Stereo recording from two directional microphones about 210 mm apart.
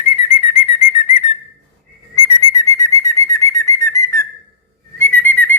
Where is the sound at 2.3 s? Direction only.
15° left (ahead or behind).